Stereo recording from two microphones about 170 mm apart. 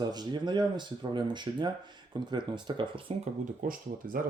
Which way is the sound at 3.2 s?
55° right (ahead or behind).